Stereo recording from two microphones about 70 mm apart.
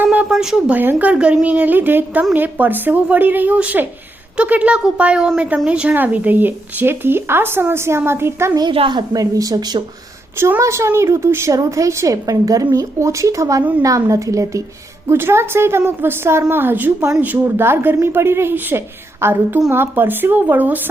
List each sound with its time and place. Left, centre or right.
0.0 s a sound: right
0.3 s speech: centre
0.7 s speech: right
5.9 s speech: right
8.5 s a woman's voice: right
9.3 s speech: right
10.6 s a woman's voice: right
11.5 s a woman's voice: right
15.0 s speech: right